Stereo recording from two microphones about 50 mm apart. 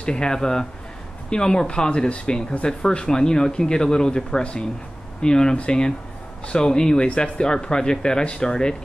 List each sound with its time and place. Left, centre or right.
0.0 s speech: centre